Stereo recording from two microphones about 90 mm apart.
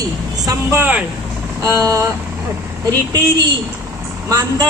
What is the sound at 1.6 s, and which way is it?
Speech, 40° right (ahead or behind).